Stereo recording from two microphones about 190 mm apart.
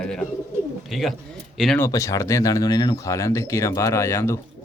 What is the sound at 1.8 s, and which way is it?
Speech, 15° left (ahead or behind).